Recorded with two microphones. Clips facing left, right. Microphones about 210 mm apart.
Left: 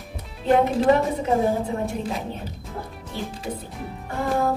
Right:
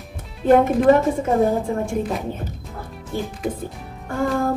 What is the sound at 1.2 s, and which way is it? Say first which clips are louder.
Speech: right 3 dB; 50° right (ahead or behind).